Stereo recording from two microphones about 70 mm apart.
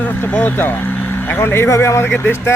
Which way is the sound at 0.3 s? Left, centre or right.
Left.